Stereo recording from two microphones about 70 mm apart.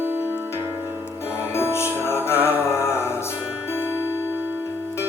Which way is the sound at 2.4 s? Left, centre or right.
Right.